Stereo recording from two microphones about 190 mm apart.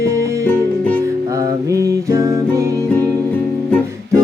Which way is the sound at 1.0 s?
15° right (ahead or behind).